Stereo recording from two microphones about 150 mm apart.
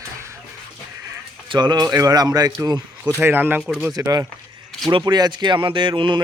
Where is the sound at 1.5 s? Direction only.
30° right (ahead or behind).